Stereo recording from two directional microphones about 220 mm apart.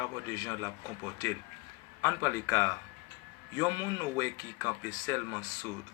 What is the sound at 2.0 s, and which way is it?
Speech, 15° left (ahead or behind).